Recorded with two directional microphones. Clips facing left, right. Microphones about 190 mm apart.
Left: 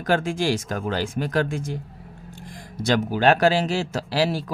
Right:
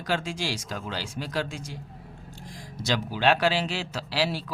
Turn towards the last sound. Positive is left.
turn(degrees=45)  # may be behind; listen again after turning